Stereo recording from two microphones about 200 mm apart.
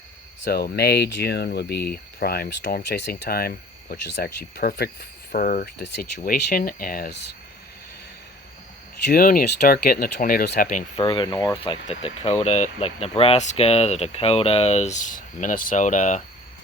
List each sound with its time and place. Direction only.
0.4 s speech: 55° left (ahead or behind)
9.0 s speech: 45° left (ahead or behind)
10.9 s speech: 25° left (ahead or behind)